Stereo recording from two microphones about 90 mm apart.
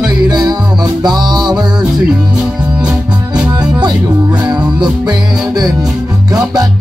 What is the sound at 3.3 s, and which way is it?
Music, 50° right (ahead or behind).